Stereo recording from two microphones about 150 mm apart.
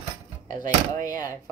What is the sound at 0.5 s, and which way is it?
Speech, 60° right (ahead or behind).